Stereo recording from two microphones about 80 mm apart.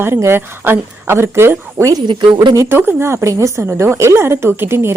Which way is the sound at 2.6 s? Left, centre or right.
Right.